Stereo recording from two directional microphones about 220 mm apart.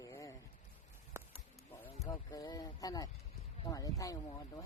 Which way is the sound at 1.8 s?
10° left (ahead or behind).